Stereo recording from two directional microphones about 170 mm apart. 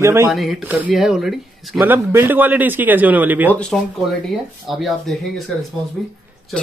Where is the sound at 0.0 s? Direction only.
15° right (ahead or behind).